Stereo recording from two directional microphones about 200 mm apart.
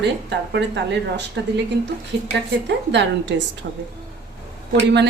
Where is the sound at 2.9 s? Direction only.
60° right (ahead or behind).